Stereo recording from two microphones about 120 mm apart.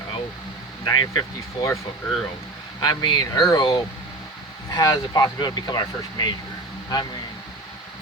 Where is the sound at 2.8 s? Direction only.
35° left (ahead or behind).